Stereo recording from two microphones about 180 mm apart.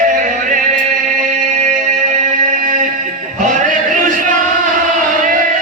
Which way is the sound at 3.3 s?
45° right (ahead or behind).